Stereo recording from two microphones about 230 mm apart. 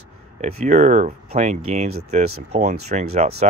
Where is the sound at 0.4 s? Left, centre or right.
Right.